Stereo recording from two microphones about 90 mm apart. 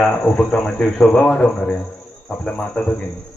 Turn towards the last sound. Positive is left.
turn(degrees=15)  # may be behind; listen again after turning